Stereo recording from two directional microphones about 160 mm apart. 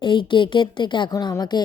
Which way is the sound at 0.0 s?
30° left (ahead or behind).